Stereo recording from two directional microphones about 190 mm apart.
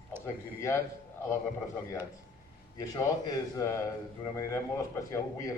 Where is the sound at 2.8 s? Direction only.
20° left (ahead or behind).